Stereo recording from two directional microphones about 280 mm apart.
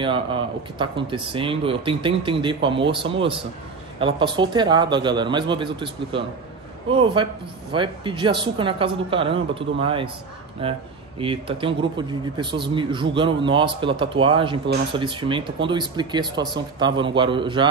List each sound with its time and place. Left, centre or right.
0.0 s a man's voice: centre